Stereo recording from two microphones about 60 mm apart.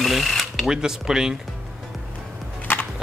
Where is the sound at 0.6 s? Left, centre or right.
Centre.